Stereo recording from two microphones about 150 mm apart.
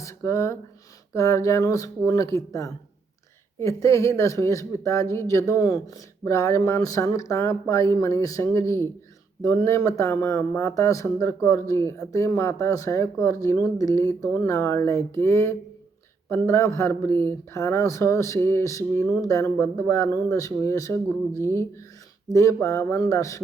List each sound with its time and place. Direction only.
0.0 s speech: 20° left (ahead or behind)